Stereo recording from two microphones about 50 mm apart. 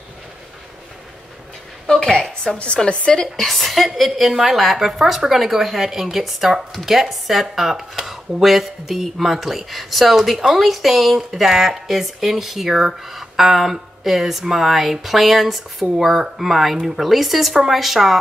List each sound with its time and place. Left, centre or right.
1.9 s a woman's voice: centre